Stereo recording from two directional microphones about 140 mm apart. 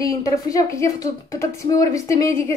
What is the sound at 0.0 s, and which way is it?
A woman's voice, 25° left (ahead or behind).